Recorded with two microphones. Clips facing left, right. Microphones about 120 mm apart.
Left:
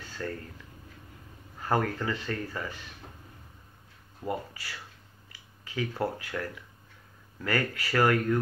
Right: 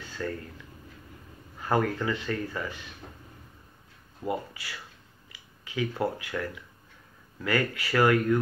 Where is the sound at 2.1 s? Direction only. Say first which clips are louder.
Right 2 dB; 35° left (ahead or behind).